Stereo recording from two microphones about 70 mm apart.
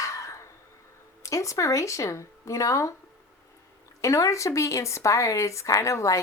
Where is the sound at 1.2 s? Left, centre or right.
Left.